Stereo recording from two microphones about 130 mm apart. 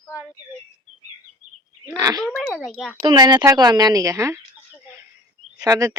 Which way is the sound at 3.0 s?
35° right (ahead or behind).